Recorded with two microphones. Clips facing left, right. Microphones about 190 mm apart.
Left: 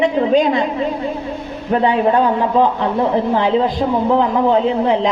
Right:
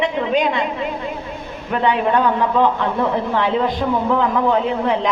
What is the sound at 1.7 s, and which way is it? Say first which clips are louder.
A man's voice: left 3 dB; 30° left (ahead or behind).